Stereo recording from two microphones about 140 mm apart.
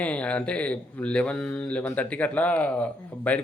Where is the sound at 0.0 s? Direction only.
10° left (ahead or behind).